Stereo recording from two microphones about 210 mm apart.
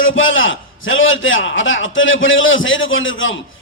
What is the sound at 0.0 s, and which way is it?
A man's voice, 70° left (ahead or behind).